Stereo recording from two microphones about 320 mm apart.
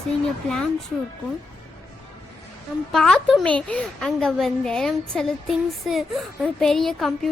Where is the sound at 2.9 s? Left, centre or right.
Centre.